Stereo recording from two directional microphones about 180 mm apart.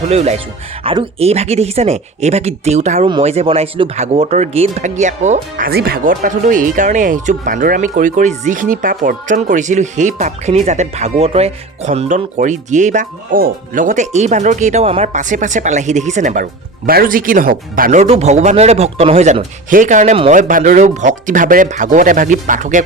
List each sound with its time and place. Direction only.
0.1 s speech: 35° right (ahead or behind)
5.6 s speech: 60° right (ahead or behind)
18.0 s speech: 35° right (ahead or behind)